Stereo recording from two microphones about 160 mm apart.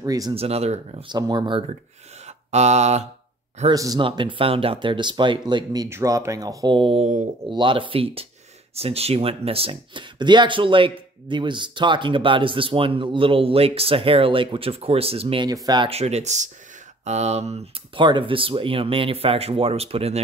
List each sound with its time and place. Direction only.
0.0 s speech: 20° right (ahead or behind)
0.3 s speech: 40° right (ahead or behind)
1.0 s speech: 25° right (ahead or behind)
2.2 s mantra: 45° right (ahead or behind)
3.7 s speech: 25° right (ahead or behind); by 7.2 s 45° right (ahead or behind)
7.4 s speech: 30° right (ahead or behind)
16.0 s speech: 45° right (ahead or behind)
18.0 s speech: 30° right (ahead or behind)